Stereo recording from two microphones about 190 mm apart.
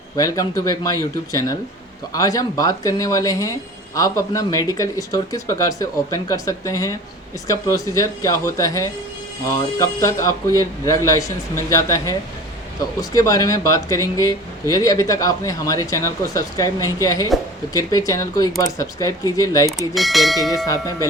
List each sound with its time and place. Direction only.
0.2 s speech: 20° left (ahead or behind)
19.9 s speech: centre (ahead or behind)
20.7 s speech: 15° left (ahead or behind)